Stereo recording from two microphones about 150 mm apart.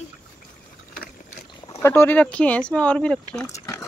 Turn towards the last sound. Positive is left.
turn(degrees=5)  # may be behind; listen again after turning